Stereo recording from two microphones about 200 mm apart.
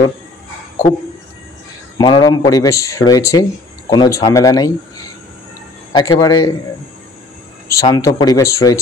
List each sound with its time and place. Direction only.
2.0 s speech: 20° left (ahead or behind)
5.9 s speech: 20° left (ahead or behind)
7.6 s speech: 15° left (ahead or behind)